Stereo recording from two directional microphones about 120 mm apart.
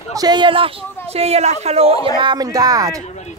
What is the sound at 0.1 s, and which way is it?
Speech, 35° right (ahead or behind).